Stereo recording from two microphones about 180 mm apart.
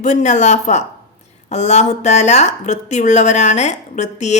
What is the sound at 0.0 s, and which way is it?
A woman's voice, 45° left (ahead or behind).